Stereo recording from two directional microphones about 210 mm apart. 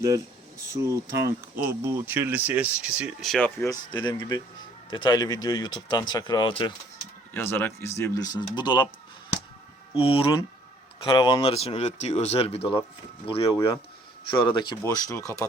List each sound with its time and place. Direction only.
0.6 s speech: 15° right (ahead or behind); by 3.5 s centre (ahead or behind)
3.6 s speech: 15° left (ahead or behind)
7.3 s speech: 10° left (ahead or behind)
9.9 s speech: 25° left (ahead or behind)